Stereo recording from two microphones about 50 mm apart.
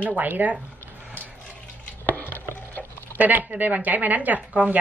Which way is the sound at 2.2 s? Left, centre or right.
Left.